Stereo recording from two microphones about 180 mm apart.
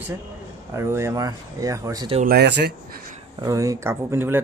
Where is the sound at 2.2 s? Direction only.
60° right (ahead or behind).